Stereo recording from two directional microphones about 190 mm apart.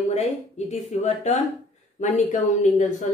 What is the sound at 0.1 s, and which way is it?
Speech, 35° left (ahead or behind).